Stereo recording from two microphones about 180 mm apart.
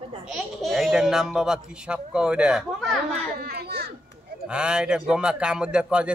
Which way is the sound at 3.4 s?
60° right (ahead or behind).